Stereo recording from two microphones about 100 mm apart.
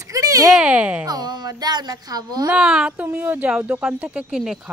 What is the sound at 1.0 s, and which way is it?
A woman's voice, 40° right (ahead or behind).